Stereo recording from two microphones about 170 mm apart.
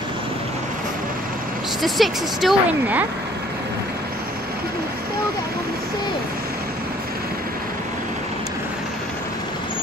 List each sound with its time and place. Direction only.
1.8 s speech: centre (ahead or behind)